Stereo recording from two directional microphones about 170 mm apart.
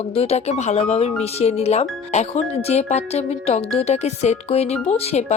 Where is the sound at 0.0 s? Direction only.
35° left (ahead or behind).